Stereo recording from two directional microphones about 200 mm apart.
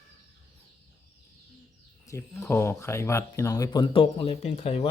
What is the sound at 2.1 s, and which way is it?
Speech, 15° left (ahead or behind).